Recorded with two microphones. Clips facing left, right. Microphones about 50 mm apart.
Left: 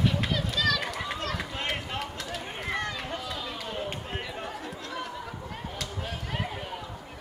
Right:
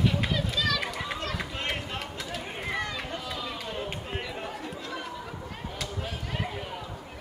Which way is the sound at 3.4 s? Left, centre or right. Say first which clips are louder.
Even; centre.